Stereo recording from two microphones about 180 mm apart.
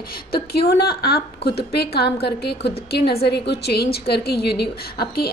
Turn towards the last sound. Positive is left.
turn(degrees=60)  # may be behind; listen again after turning